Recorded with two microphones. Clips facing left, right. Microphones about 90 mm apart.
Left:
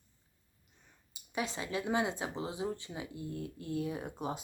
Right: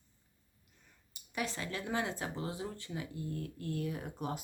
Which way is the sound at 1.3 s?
20° left (ahead or behind).